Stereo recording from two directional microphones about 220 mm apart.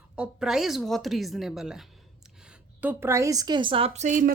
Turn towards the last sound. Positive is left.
turn(degrees=-35)  # may be behind; listen again after turning